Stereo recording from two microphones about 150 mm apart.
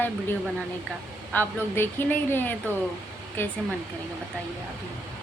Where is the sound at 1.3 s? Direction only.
10° left (ahead or behind).